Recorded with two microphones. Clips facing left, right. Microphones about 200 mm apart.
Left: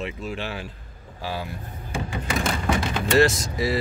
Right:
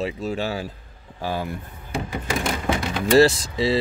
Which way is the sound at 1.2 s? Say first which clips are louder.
Right 4 dB; 50° right (ahead or behind).